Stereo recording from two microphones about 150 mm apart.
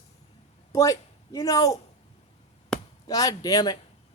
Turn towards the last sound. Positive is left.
turn(degrees=25)  # may be behind; listen again after turning